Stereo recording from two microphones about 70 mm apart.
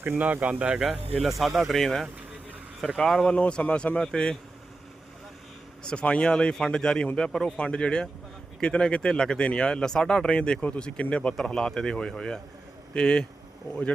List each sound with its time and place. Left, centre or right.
0.2 s speech: right
0.8 s speech: centre
3.3 s speech: centre
5.8 s speech: centre